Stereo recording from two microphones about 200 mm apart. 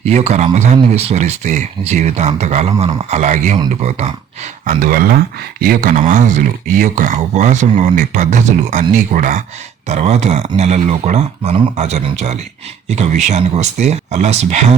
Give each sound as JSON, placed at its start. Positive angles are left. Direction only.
{"t": 0.0, "sound": "speech", "side_deg": -30}